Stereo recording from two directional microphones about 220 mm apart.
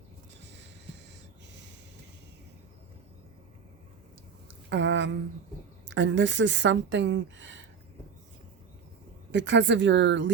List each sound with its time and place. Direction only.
4.7 s a sound: 55° right (ahead or behind)
5.9 s a woman's voice: 55° right (ahead or behind)
9.3 s a woman's voice: 55° right (ahead or behind)